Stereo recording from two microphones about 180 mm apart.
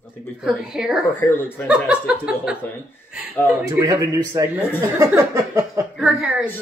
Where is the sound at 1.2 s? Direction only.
10° left (ahead or behind).